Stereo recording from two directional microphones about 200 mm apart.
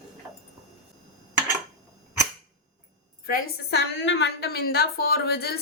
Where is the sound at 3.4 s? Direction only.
65° left (ahead or behind).